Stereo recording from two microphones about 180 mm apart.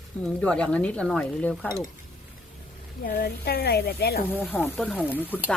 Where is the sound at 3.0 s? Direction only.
60° left (ahead or behind).